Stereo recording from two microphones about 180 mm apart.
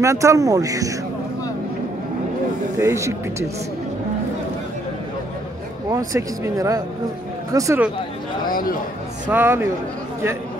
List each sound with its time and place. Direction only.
0.0 s speech: 15° right (ahead or behind)
2.8 s speech: 15° right (ahead or behind)
5.9 s speech: 20° right (ahead or behind)
8.5 s speech: 50° left (ahead or behind)
9.3 s speech: 10° right (ahead or behind)